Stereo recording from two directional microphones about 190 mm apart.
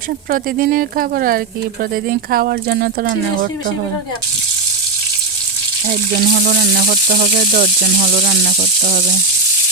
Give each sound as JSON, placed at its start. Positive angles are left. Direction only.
{"t": 0.3, "sound": "speech", "side_deg": -50}
{"t": 5.9, "sound": "speech", "side_deg": -55}